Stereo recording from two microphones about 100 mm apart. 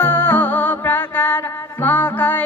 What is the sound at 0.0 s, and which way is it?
Music, 20° left (ahead or behind).